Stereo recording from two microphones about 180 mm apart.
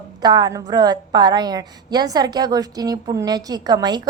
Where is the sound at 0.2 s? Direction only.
25° right (ahead or behind).